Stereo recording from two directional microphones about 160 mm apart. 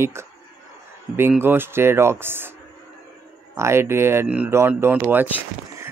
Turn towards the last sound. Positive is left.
turn(degrees=-10)  # may be behind; listen again after turning